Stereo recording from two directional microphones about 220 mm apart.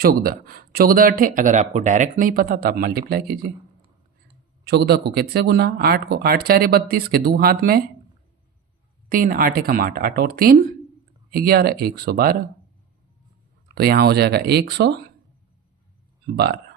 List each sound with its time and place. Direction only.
0.0 s speech: 40° right (ahead or behind)
4.6 s speech: 45° right (ahead or behind)
9.0 s speech: 40° right (ahead or behind)
13.7 s speech: 45° right (ahead or behind)
16.2 s speech: 45° right (ahead or behind)